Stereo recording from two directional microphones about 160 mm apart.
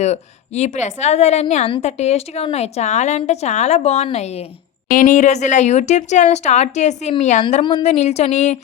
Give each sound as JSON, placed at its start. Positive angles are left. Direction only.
{"t": 0.0, "sound": "a woman's voice", "side_deg": 45}
{"t": 4.9, "sound": "a woman's voice", "side_deg": 55}
{"t": 7.6, "sound": "a woman's voice", "side_deg": 25}
{"t": 7.9, "sound": "a woman's voice", "side_deg": 45}